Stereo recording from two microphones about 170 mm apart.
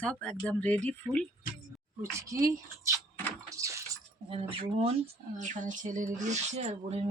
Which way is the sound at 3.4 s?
20° right (ahead or behind).